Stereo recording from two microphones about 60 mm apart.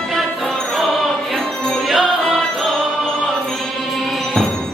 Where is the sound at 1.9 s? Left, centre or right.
Centre.